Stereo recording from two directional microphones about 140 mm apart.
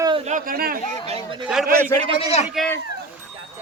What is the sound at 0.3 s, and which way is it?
Speech, 80° right.